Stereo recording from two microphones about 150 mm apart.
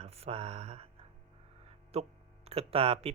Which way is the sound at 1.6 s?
45° right (ahead or behind).